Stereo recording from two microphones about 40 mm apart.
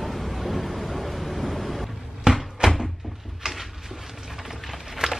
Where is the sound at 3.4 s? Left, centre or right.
Centre.